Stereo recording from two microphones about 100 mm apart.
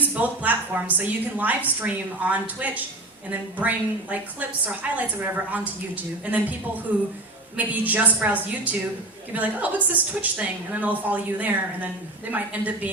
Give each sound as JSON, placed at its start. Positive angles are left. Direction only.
{"t": 0.1, "sound": "a woman's voice", "side_deg": -15}
{"t": 6.9, "sound": "a woman's voice", "side_deg": -15}